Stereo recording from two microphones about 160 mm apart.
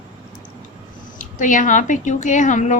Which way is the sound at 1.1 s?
55° left (ahead or behind).